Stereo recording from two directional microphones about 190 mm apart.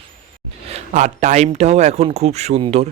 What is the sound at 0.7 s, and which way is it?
Speech, 35° right (ahead or behind).